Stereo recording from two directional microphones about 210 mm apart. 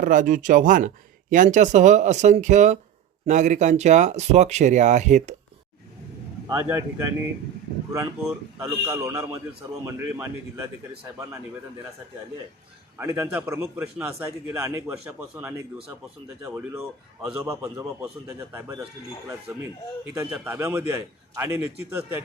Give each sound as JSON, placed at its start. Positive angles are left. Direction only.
{"t": 0.0, "sound": "speech", "side_deg": -40}
{"t": 6.5, "sound": "a man's voice", "side_deg": -10}
{"t": 8.6, "sound": "a man's voice", "side_deg": -15}
{"t": 13.0, "sound": "a man's voice", "side_deg": -10}
{"t": 20.1, "sound": "a man's voice", "side_deg": -10}